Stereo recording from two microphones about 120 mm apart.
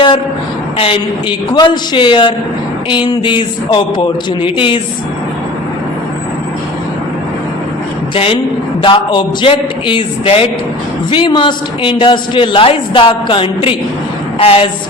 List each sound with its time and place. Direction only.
0.8 s a man's voice: 50° left (ahead or behind)
1.5 s a man's voice: 35° left (ahead or behind)
8.1 s a man's voice: 50° left (ahead or behind)